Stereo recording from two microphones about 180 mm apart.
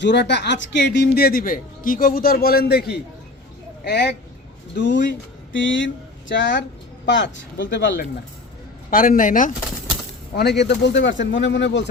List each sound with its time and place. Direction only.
0.0 s a man's voice: 75° left (ahead or behind); by 6.6 s 90° left
7.0 s speech: 75° left (ahead or behind)
8.9 s speech: 50° left (ahead or behind)
10.3 s speech: 65° left (ahead or behind)